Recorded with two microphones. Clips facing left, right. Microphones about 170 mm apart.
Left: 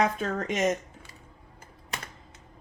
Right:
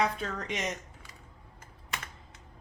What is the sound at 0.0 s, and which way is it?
Speech, 50° left (ahead or behind).